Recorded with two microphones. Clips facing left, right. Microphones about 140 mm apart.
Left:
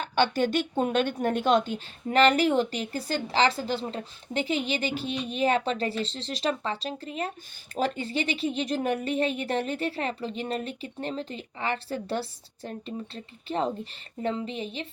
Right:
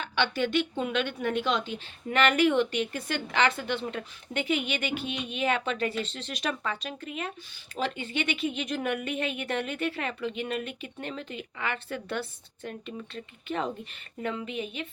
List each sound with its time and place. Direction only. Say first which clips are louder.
0.0 s speech: left 4 dB; 45° left (ahead or behind)